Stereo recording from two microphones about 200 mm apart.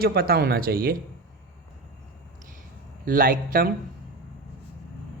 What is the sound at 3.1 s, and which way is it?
Speech, 45° right (ahead or behind).